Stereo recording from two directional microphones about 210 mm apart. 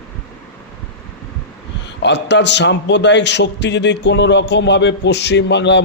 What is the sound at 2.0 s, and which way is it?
A man's voice, 55° left (ahead or behind).